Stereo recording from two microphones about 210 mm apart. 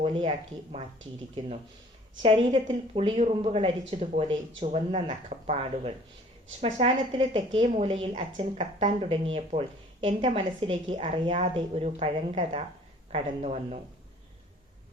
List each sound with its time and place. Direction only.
0.0 s speech: 25° right (ahead or behind)
2.2 s speech: 25° right (ahead or behind)